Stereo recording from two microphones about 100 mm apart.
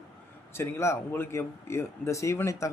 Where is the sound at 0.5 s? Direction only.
30° left (ahead or behind).